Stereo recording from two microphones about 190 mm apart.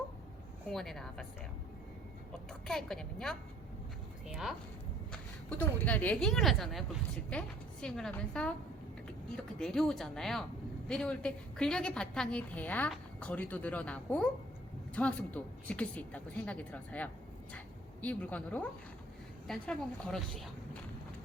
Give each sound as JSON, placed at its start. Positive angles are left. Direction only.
{"t": 0.7, "sound": "speech", "side_deg": 0}
{"t": 2.5, "sound": "a woman's voice", "side_deg": 0}